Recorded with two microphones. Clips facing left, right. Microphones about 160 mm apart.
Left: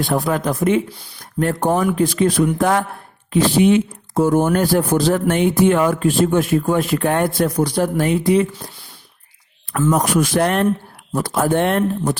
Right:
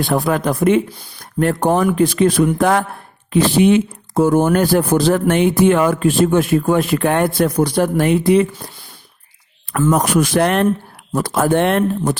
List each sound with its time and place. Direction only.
0.1 s speech: 70° right (ahead or behind)
9.9 s speech: 80° right